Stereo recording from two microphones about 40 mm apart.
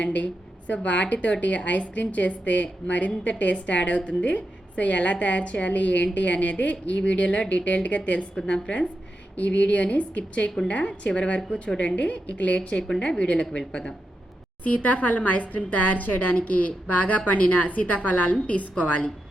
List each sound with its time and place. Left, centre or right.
0.0 s a woman's voice: left
8.4 s a woman's voice: centre
9.3 s a woman's voice: left
14.6 s a woman's voice: left